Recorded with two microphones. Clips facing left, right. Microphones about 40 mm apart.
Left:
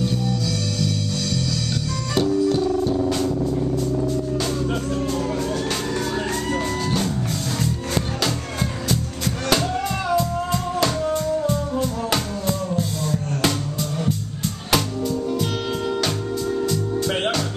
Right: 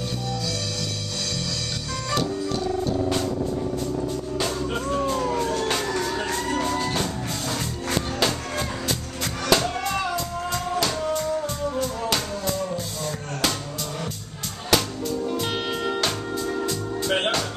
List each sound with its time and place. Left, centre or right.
4.9 s emergency vehicle: centre
5.9 s music: centre
10.8 s music: centre
14.7 s music: centre
16.6 s music: centre